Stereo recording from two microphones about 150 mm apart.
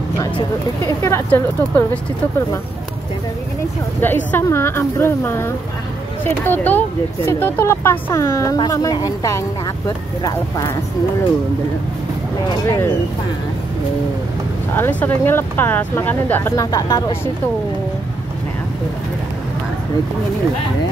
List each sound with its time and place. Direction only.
0.8 s speech: 20° left (ahead or behind)
4.0 s speech: 15° left (ahead or behind)
12.4 s speech: 20° left (ahead or behind)
14.8 s speech: 10° left (ahead or behind)